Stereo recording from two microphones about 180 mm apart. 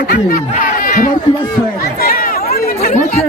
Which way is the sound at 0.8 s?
50° left (ahead or behind).